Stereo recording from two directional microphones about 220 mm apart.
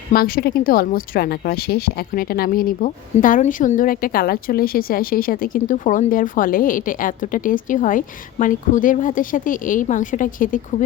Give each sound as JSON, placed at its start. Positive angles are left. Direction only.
{"t": 0.1, "sound": "a woman's voice", "side_deg": 40}